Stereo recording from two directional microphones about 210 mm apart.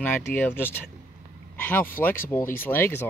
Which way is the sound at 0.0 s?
5° left (ahead or behind).